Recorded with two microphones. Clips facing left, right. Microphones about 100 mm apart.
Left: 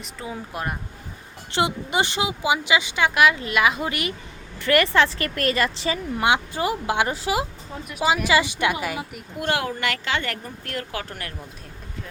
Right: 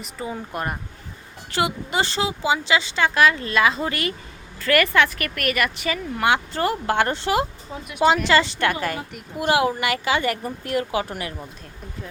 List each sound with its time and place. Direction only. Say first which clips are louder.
0.0 s speech: right 3 dB; centre (ahead or behind)
1.5 s a woman's voice: even; 20° left (ahead or behind)
9.4 s speech: right 5 dB; 10° right (ahead or behind)